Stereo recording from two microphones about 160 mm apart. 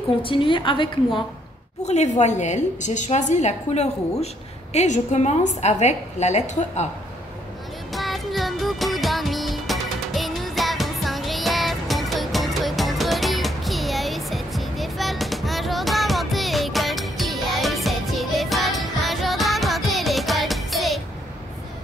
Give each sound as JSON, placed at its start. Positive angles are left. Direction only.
{"t": 0.2, "sound": "a woman's voice", "side_deg": 35}
{"t": 1.9, "sound": "a woman's voice", "side_deg": 45}
{"t": 7.9, "sound": "music", "side_deg": 0}